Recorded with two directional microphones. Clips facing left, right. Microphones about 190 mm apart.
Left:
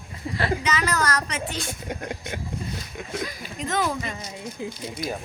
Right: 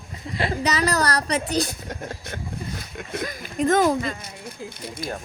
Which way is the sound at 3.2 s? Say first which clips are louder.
Right 10 dB; 50° right (ahead or behind).